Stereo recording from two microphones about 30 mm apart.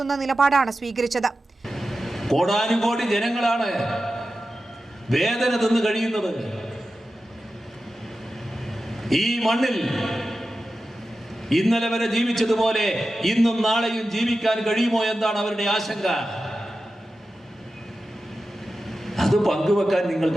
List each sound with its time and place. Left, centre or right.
0.0 s a woman's voice: centre
8.6 s a sound: centre
11.4 s a man's voice: centre
18.9 s a man's voice: centre